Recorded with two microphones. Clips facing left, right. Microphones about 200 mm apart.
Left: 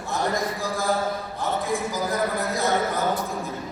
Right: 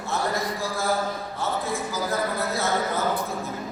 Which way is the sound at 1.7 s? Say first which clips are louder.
Left 2 dB; 15° left (ahead or behind).